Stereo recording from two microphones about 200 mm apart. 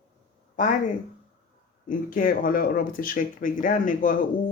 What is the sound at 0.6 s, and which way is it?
Speech, 40° left (ahead or behind).